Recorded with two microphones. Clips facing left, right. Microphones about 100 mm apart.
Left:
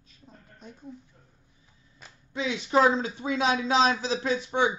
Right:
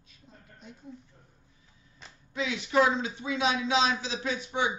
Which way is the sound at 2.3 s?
35° left (ahead or behind).